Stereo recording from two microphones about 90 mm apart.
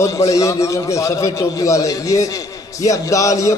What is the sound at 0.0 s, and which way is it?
A man's voice, 35° left (ahead or behind).